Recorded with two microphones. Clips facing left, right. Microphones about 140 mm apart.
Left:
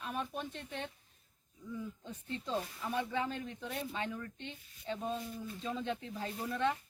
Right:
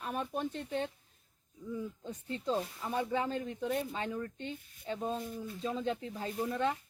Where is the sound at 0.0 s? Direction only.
45° right (ahead or behind).